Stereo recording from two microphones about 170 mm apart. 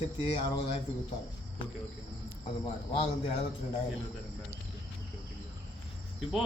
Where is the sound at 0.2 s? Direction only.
30° left (ahead or behind).